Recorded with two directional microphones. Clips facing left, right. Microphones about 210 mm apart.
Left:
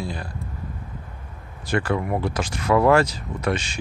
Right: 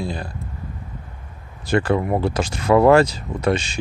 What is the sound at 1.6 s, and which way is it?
Speech, 25° right (ahead or behind).